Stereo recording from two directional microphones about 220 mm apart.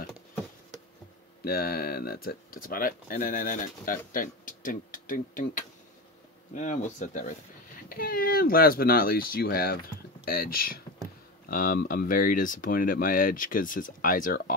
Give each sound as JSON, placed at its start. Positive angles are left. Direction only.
{"t": 1.4, "sound": "speech", "side_deg": 45}